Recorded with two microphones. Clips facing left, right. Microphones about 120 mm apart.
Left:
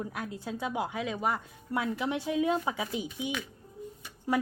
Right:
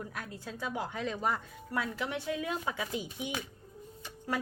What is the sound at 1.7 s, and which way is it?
A woman's voice, 20° left (ahead or behind).